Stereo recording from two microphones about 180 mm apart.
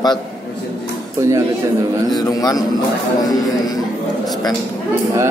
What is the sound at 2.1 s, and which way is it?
Speech, 20° left (ahead or behind).